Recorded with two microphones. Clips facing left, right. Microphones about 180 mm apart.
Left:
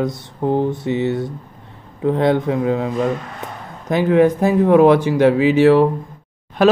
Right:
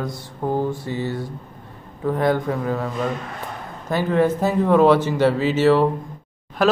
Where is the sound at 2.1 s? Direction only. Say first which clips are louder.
Left 4 dB; 25° left (ahead or behind).